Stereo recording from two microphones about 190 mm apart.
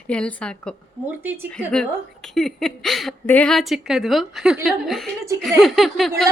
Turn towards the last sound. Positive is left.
turn(degrees=0)  # may be behind; listen again after turning